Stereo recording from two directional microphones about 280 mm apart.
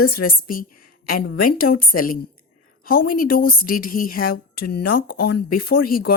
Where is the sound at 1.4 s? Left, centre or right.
Left.